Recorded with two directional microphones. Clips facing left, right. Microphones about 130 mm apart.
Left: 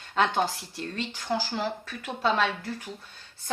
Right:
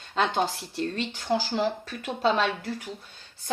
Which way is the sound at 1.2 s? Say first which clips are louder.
Right 4 dB; 20° right (ahead or behind).